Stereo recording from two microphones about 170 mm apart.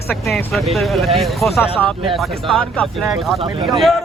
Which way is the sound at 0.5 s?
Centre (ahead or behind).